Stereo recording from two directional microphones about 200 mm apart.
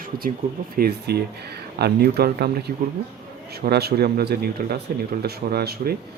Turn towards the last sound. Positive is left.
turn(degrees=-50)  # may be behind; listen again after turning